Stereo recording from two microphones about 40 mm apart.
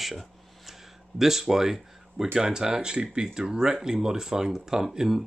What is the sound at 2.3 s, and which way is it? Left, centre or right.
Speech, centre.